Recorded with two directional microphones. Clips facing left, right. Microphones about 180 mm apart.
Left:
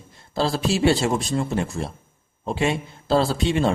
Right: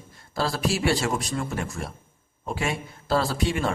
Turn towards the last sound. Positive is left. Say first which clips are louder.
# left 5 dB
turn(degrees=25)  # may be behind; listen again after turning